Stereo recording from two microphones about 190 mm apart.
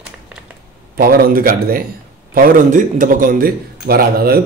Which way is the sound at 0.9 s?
50° right (ahead or behind).